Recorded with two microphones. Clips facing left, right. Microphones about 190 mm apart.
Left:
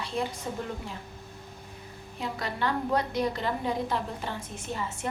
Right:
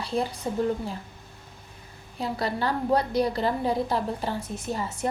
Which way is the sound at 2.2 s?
35° right (ahead or behind).